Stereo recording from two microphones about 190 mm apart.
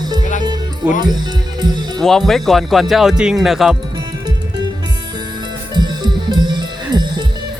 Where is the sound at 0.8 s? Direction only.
5° right (ahead or behind).